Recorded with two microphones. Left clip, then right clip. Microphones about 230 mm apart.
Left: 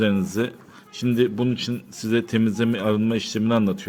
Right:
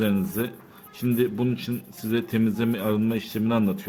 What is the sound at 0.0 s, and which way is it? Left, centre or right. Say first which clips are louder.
Speech: left 4 dB; centre.